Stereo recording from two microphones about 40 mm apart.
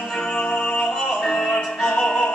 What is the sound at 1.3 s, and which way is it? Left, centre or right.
Music, left.